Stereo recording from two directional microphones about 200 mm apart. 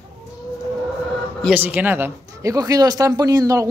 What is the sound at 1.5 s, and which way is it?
Speech, 10° right (ahead or behind).